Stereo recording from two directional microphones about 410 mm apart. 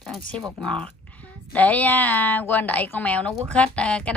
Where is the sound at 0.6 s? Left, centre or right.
Centre.